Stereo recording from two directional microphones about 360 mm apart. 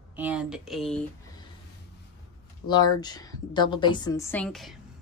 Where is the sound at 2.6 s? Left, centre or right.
Centre.